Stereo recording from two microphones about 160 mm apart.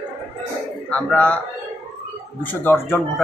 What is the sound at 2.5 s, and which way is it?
Speech, 15° left (ahead or behind).